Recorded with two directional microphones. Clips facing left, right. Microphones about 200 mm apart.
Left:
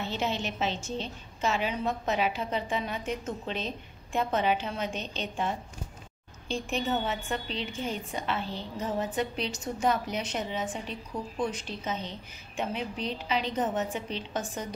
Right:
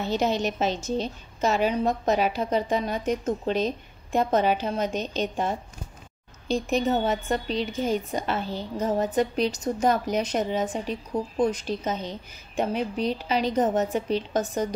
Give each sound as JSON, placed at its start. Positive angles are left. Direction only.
{"t": 0.0, "sound": "a woman's voice", "side_deg": -40}